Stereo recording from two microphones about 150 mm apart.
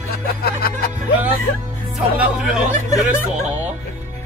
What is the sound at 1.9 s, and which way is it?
Speech, 5° right (ahead or behind).